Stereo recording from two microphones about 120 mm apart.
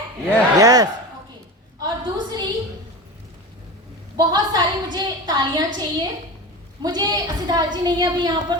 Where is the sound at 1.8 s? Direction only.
35° right (ahead or behind).